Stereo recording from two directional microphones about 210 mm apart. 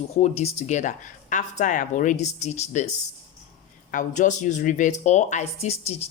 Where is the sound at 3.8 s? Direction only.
40° left (ahead or behind).